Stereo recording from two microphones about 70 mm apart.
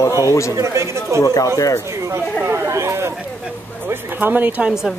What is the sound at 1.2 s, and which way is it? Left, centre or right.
Speech, left.